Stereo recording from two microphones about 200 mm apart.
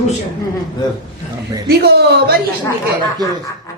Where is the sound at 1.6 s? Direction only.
50° right (ahead or behind).